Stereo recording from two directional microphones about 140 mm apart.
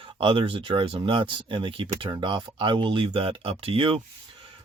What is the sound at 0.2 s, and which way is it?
Speech, 40° right (ahead or behind).